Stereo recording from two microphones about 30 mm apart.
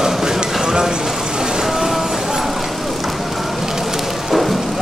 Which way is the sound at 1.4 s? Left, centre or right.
Right.